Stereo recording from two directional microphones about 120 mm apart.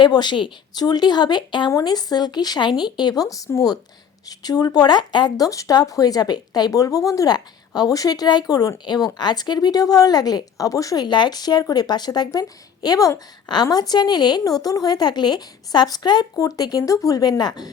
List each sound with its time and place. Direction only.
0.0 s speech: 40° left (ahead or behind)